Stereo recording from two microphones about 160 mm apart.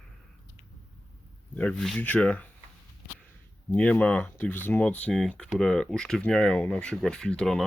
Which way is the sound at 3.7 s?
10° left (ahead or behind).